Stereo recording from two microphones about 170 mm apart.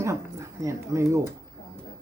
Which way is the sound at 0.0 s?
20° right (ahead or behind).